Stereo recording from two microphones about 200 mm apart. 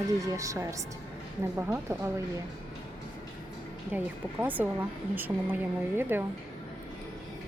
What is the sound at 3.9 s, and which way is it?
Speech, 10° right (ahead or behind).